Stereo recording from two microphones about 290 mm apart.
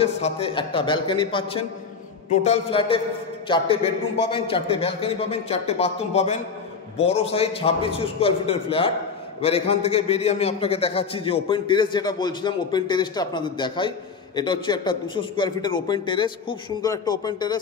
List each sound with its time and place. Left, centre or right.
0.0 s a man's voice: centre